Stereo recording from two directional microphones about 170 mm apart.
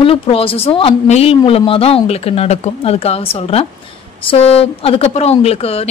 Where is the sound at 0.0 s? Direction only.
35° left (ahead or behind).